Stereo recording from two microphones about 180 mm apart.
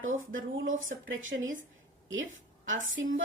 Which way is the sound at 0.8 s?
90° right.